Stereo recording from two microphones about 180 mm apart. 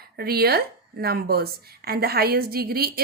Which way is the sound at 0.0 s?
60° right (ahead or behind).